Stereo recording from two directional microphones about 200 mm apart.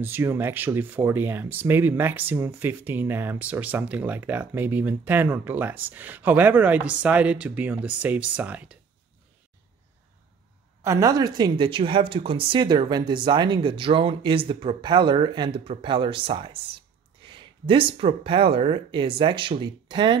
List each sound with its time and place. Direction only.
0.0 s speech: 10° right (ahead or behind)
10.8 s speech: 15° right (ahead or behind)